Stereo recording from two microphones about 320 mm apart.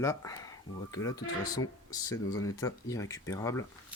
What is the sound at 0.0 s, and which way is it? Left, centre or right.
Speech, centre.